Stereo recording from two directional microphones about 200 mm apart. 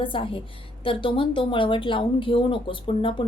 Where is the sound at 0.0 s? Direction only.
25° left (ahead or behind).